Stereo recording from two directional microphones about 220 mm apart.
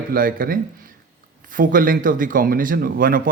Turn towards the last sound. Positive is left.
turn(degrees=-40)  # may be behind; listen again after turning